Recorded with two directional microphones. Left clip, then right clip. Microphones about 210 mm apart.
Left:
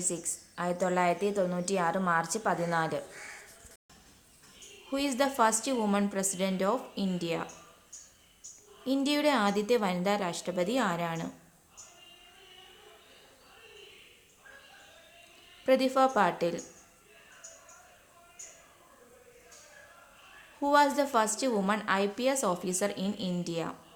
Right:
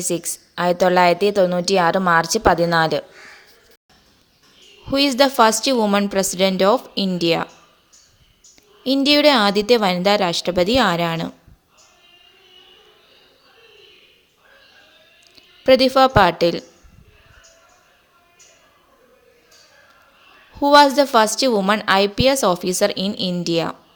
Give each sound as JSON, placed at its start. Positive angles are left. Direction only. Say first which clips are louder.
{"t": 0.0, "sound": "a woman's voice", "louder": "right 12 dB", "side_deg": -35}
{"t": 4.9, "sound": "a woman's voice", "louder": "right 14 dB", "side_deg": -35}
{"t": 8.8, "sound": "a woman's voice", "louder": "right 14 dB", "side_deg": -35}
{"t": 15.6, "sound": "a woman's voice", "louder": "right 12 dB", "side_deg": -35}
{"t": 20.6, "sound": "a woman's voice", "louder": "right 13 dB", "side_deg": -35}